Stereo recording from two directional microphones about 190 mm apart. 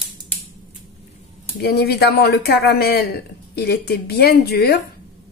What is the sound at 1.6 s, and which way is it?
Cutlery, 55° left (ahead or behind).